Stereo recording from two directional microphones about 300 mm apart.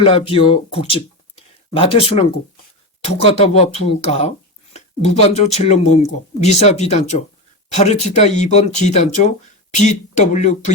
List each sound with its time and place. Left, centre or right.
0.0 s speech: centre